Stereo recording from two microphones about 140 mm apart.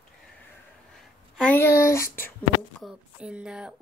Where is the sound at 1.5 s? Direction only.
15° left (ahead or behind).